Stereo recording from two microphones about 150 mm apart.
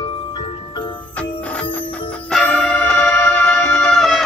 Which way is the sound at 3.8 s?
5° left (ahead or behind).